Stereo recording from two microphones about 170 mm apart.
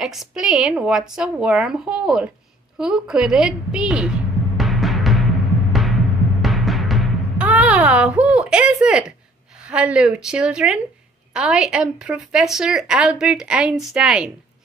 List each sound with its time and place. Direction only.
0.0 s speech: centre (ahead or behind)
2.8 s music: 5° right (ahead or behind)
6.4 s timpani: centre (ahead or behind)
9.6 s speech: 5° right (ahead or behind)